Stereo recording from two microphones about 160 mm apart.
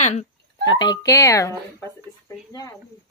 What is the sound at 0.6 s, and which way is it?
Speech, 25° left (ahead or behind).